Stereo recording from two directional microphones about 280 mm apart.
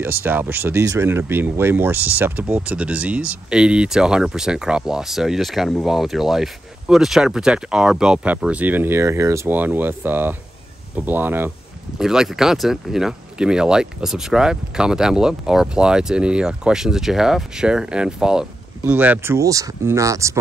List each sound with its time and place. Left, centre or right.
0.2 s speech: centre